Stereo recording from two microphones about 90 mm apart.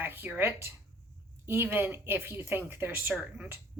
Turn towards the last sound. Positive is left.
turn(degrees=-25)  # may be behind; listen again after turning